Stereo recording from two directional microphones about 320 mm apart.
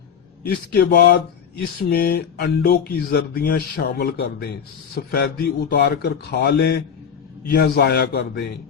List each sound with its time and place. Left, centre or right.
0.7 s speech: left